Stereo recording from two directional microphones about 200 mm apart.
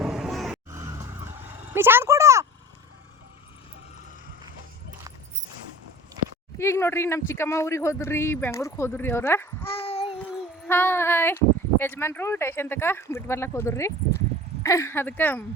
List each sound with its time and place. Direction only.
0.0 s music: 5° right (ahead or behind)
0.7 s a sound: 15° right (ahead or behind)
6.6 s speech: 15° left (ahead or behind)
9.6 s child singing: 30° left (ahead or behind)
10.0 s a sound: centre (ahead or behind)
10.7 s speech: 10° left (ahead or behind)